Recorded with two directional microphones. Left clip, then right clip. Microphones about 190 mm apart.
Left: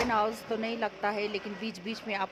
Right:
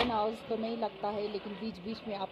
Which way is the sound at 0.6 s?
35° left (ahead or behind).